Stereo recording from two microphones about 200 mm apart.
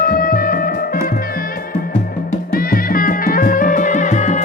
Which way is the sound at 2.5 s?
45° left (ahead or behind).